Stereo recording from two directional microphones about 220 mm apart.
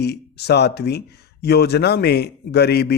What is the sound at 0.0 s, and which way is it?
Speech, 50° left (ahead or behind).